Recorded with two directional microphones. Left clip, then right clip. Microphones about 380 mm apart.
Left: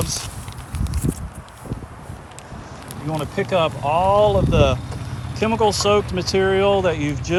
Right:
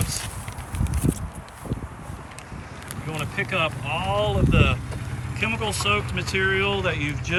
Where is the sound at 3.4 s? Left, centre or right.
Centre.